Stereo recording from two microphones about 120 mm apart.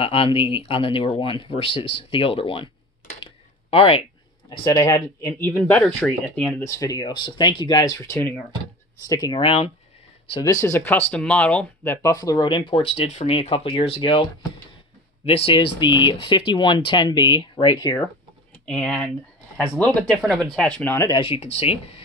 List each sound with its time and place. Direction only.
0.0 s speech: 50° left (ahead or behind)
3.2 s a sound: 50° left (ahead or behind)
4.6 s speech: 25° left (ahead or behind)
5.5 s speech: 10° left (ahead or behind)
6.7 s speech: 30° left (ahead or behind)
8.0 s speech: 20° left (ahead or behind)
9.1 s speech: 40° left (ahead or behind)
10.4 s speech: 25° left (ahead or behind)
18.7 s speech: 5° left (ahead or behind)
21.1 s speech: 50° left (ahead or behind)